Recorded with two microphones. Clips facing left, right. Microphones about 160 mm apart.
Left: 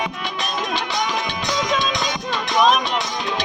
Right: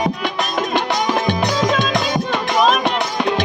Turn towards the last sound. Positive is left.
turn(degrees=-55)  # may be behind; listen again after turning